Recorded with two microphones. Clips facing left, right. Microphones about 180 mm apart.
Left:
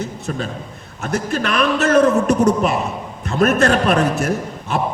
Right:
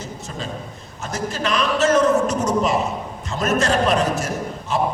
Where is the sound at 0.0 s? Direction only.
60° left (ahead or behind).